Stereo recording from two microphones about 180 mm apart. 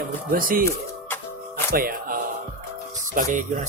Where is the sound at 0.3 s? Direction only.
50° right (ahead or behind).